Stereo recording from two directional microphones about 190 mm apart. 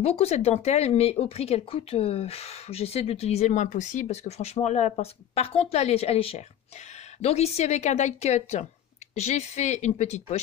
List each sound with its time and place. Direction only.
0.0 s speech: 35° left (ahead or behind)